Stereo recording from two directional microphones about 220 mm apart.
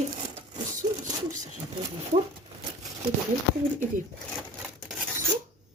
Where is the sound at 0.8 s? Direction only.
20° right (ahead or behind).